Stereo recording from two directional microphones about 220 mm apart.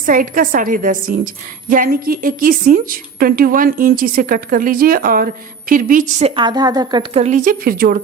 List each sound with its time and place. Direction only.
0.0 s a woman's voice: 40° right (ahead or behind)